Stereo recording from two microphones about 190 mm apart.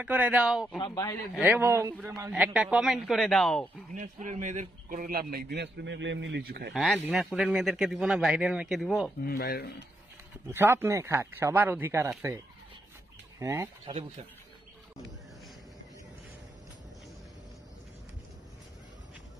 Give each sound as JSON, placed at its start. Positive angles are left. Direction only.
{"t": 0.0, "sound": "speech", "side_deg": -5}
{"t": 0.7, "sound": "speech", "side_deg": 20}
{"t": 1.3, "sound": "a man's voice", "side_deg": -10}
{"t": 3.9, "sound": "a man's voice", "side_deg": -40}
{"t": 6.7, "sound": "a man's voice", "side_deg": 0}
{"t": 9.2, "sound": "speech", "side_deg": 50}
{"t": 10.5, "sound": "speech", "side_deg": -15}
{"t": 13.4, "sound": "speech", "side_deg": -15}